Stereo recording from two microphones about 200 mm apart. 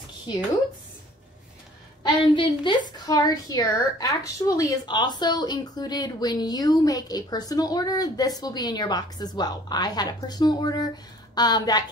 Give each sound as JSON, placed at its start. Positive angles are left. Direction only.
{"t": 2.3, "sound": "a woman's voice", "side_deg": 25}